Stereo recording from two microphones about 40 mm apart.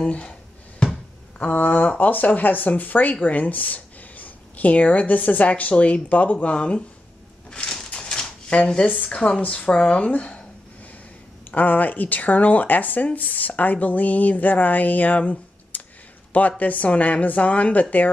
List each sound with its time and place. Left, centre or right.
0.0 s speech: left
1.4 s speech: left
7.5 s a sound: left
8.9 s speech: left
11.5 s speech: left